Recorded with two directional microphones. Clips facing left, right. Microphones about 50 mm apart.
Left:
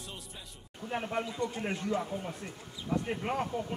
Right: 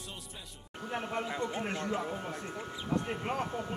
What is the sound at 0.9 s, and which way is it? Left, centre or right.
Speech, centre.